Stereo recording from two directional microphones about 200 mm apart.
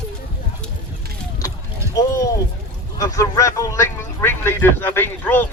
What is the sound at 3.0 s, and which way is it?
Speech, 15° left (ahead or behind).